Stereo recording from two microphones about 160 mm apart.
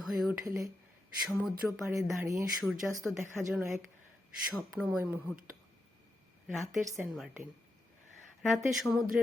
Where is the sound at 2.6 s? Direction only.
Centre (ahead or behind).